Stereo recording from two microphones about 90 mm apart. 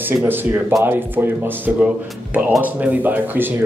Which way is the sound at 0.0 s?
20° right (ahead or behind).